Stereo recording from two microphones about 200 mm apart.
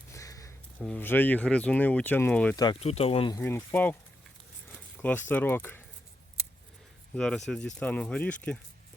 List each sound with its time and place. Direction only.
0.1 s a sound: 15° left (ahead or behind)
0.8 s speech: 5° left (ahead or behind)
2.8 s speech: 30° left (ahead or behind)
3.3 s speech: 10° left (ahead or behind)
4.9 s speech: 10° left (ahead or behind)
7.2 s speech: centre (ahead or behind)